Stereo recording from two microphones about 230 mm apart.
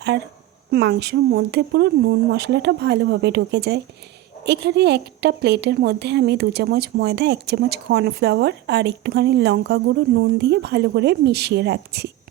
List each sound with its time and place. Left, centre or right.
0.7 s a woman's voice: right